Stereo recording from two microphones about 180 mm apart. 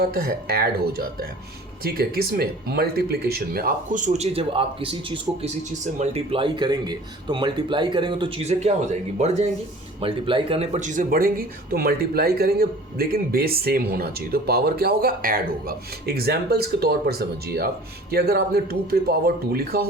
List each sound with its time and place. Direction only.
0.0 s speech: 60° right (ahead or behind)